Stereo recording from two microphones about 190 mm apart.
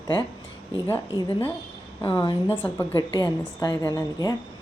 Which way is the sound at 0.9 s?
15° left (ahead or behind).